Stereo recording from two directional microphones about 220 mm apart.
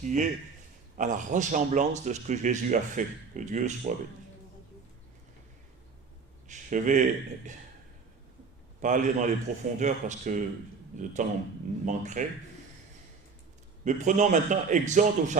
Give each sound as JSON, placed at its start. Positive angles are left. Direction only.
{"t": 0.0, "sound": "speech", "side_deg": -35}
{"t": 6.5, "sound": "speech", "side_deg": -35}
{"t": 8.8, "sound": "speech", "side_deg": -35}
{"t": 13.8, "sound": "speech", "side_deg": -35}